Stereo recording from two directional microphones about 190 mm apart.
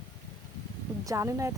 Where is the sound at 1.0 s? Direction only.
15° right (ahead or behind).